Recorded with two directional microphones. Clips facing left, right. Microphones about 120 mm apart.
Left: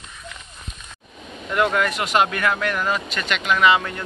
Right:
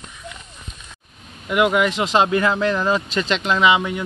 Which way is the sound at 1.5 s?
10° right (ahead or behind).